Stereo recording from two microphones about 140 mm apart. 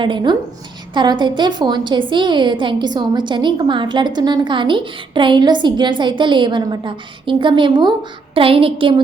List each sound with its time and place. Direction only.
0.0 s a woman's voice: 35° right (ahead or behind)